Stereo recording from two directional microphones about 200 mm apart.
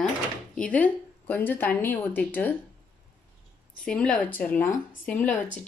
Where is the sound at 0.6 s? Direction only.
5° left (ahead or behind).